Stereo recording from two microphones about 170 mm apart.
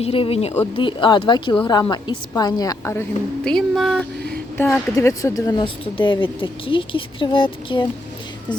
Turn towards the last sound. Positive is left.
turn(degrees=30)  # may be behind; listen again after turning